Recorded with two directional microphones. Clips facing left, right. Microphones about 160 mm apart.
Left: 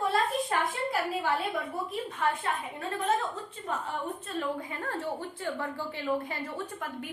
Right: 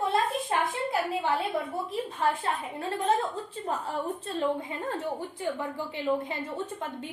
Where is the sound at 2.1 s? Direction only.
30° right (ahead or behind).